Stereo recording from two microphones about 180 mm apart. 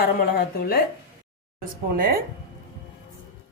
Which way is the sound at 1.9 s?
55° right (ahead or behind).